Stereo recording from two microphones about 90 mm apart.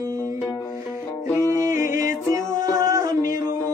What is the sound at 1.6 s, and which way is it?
Music, 30° right (ahead or behind).